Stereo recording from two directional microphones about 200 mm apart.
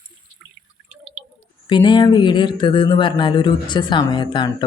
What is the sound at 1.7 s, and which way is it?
Speech, 20° left (ahead or behind).